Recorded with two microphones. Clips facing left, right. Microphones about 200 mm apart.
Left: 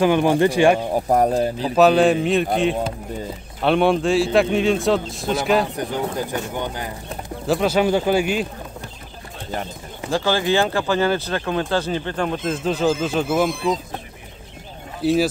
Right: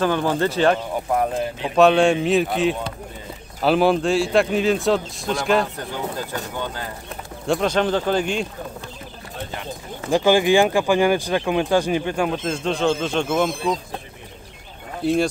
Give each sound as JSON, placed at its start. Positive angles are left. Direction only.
{"t": 0.0, "sound": "speech", "side_deg": 15}
{"t": 0.9, "sound": "speech", "side_deg": 40}
{"t": 1.8, "sound": "a man's voice", "side_deg": 0}
{"t": 3.6, "sound": "a man's voice", "side_deg": 0}
{"t": 5.8, "sound": "speech", "side_deg": 15}
{"t": 7.4, "sound": "speech", "side_deg": 5}
{"t": 10.1, "sound": "speech", "side_deg": -15}
{"t": 12.3, "sound": "a man's voice", "side_deg": 0}